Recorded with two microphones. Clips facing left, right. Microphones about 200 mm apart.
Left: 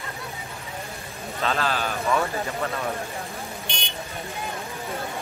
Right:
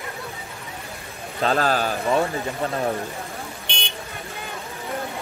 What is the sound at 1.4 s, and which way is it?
Speech, 40° right (ahead or behind).